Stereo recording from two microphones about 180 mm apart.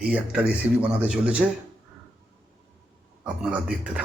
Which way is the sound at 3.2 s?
5° right (ahead or behind).